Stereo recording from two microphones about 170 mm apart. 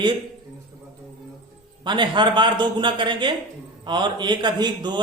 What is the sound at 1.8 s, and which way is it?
A man's voice, 25° right (ahead or behind).